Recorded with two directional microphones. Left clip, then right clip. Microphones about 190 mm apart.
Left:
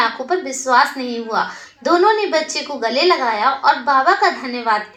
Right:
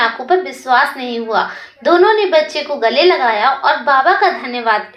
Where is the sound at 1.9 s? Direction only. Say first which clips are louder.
Right 4 dB; 20° right (ahead or behind).